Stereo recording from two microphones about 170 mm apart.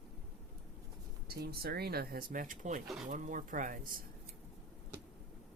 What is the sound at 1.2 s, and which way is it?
Speech, 65° right (ahead or behind).